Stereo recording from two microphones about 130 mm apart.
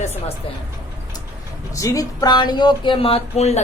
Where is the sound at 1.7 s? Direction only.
25° left (ahead or behind); by 3.6 s 55° left (ahead or behind).